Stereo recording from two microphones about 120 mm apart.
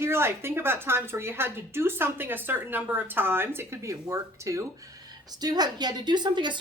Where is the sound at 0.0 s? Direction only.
20° right (ahead or behind).